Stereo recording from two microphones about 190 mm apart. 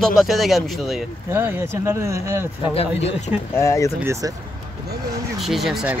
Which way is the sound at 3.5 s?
15° left (ahead or behind).